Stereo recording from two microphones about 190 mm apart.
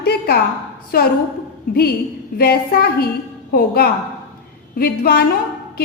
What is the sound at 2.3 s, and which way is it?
A woman's voice, 55° left (ahead or behind).